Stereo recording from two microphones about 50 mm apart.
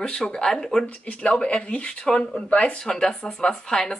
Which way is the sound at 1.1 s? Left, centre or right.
Left.